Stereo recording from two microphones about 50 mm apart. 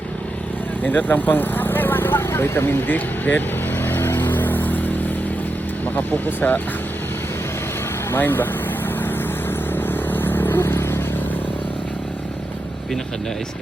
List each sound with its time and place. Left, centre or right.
0.8 s vehicle: left
2.8 s vehicle: left
6.0 s speech: left
8.1 s speech: left
9.5 s vehicle: left